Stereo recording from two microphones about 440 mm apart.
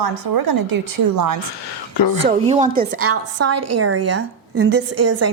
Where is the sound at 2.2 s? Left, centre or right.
Centre.